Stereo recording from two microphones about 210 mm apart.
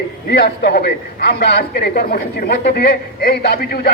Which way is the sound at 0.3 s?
50° left (ahead or behind).